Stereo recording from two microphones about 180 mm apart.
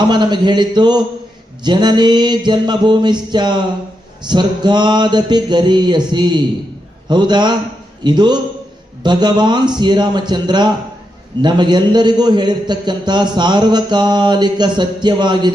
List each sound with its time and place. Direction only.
0.1 s a man's voice: 25° right (ahead or behind)